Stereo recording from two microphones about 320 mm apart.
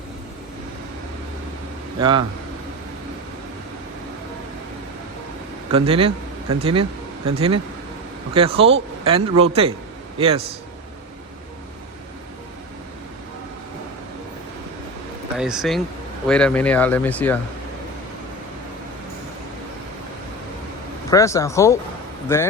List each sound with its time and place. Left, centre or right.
2.0 s speech: centre
5.7 s a man's voice: centre
15.4 s speech: centre
21.1 s speech: centre